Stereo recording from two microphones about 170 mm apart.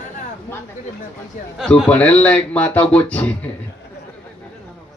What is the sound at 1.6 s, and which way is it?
Speech, 10° left (ahead or behind).